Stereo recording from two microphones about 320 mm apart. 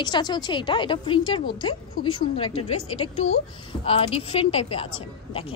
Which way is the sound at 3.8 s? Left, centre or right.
Centre.